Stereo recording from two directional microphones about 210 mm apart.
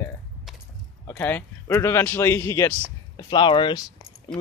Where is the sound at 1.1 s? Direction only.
10° left (ahead or behind).